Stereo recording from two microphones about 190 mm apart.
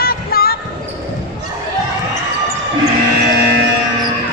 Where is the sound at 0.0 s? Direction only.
50° left (ahead or behind).